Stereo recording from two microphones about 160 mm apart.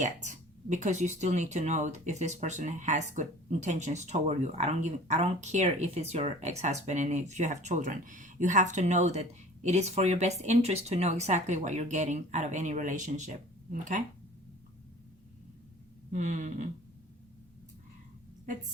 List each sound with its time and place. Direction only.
0.0 s speech: 50° right (ahead or behind)
16.1 s speech: 50° right (ahead or behind)